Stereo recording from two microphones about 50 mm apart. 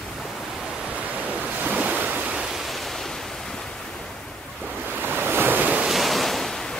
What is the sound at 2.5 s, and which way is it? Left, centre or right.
Waves, centre.